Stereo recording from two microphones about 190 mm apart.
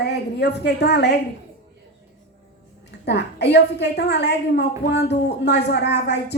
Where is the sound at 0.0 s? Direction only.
60° left (ahead or behind).